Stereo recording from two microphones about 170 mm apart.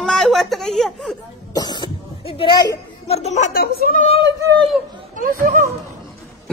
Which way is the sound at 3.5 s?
60° left (ahead or behind).